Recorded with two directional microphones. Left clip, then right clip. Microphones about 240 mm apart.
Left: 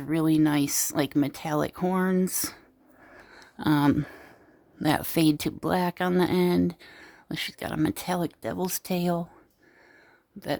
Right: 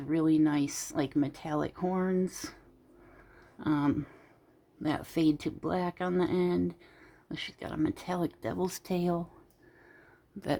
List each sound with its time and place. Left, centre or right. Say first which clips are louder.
0.0 s speech: left 3 dB; left
3.2 s a sound: left 9 dB; left
4.8 s speech: left 6 dB; left